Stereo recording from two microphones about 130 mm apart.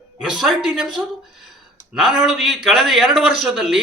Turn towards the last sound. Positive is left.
turn(degrees=-5)  # may be behind; listen again after turning